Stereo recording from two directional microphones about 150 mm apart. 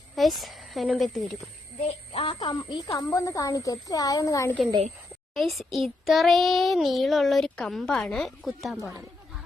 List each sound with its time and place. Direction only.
0.2 s speech: centre (ahead or behind)
2.1 s a woman's voice: 35° left (ahead or behind)
5.3 s child singing: centre (ahead or behind)